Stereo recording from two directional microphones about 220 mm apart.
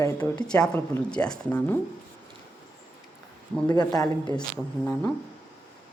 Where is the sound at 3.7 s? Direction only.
20° left (ahead or behind).